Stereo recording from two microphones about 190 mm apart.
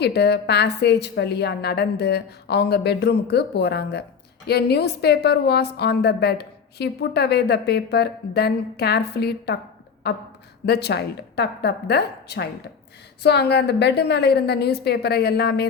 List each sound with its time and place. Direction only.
0.0 s a woman's voice: 60° left (ahead or behind)